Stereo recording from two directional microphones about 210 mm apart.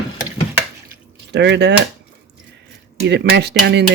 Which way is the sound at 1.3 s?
55° right (ahead or behind).